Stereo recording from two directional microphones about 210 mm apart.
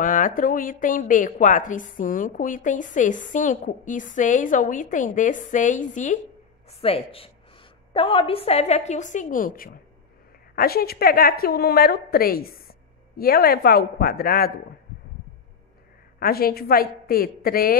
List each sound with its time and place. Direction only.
0.0 s a woman's voice: 40° left (ahead or behind)
16.2 s a woman's voice: 45° left (ahead or behind)